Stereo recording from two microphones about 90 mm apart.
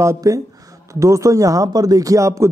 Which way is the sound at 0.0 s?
35° right (ahead or behind).